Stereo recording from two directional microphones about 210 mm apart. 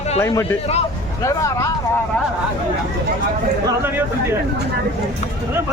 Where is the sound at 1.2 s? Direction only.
15° left (ahead or behind).